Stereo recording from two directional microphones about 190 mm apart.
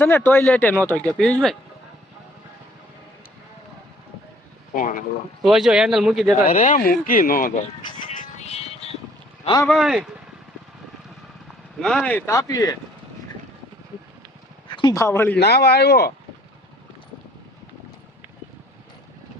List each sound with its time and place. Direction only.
0.0 s speech: 10° left (ahead or behind)
4.7 s speech: 45° left (ahead or behind)
5.4 s speech: centre (ahead or behind)
6.4 s speech: 45° left (ahead or behind)
8.2 s music: 35° left (ahead or behind)
9.4 s speech: 20° left (ahead or behind)
9.6 s speech: centre (ahead or behind)
11.8 s speech: 5° left (ahead or behind)
14.7 s speech: 25° left (ahead or behind)
15.4 s speech: 60° left (ahead or behind)